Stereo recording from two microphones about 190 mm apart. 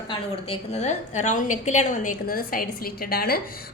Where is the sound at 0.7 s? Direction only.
35° left (ahead or behind).